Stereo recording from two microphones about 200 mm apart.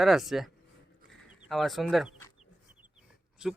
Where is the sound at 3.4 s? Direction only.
5° right (ahead or behind).